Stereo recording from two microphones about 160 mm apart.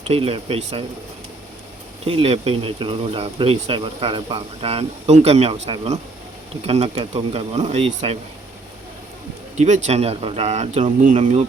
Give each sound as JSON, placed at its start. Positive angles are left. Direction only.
{"t": 0.0, "sound": "speech", "side_deg": -40}
{"t": 2.0, "sound": "speech", "side_deg": -35}
{"t": 9.6, "sound": "speech", "side_deg": -45}